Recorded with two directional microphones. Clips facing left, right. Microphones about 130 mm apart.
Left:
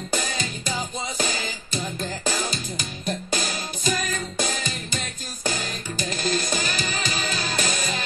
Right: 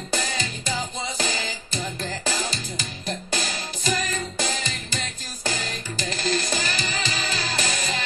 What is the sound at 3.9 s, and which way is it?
Music, 25° right (ahead or behind).